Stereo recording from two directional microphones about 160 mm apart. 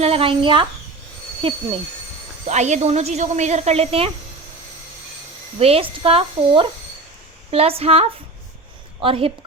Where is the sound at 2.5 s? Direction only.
45° right (ahead or behind).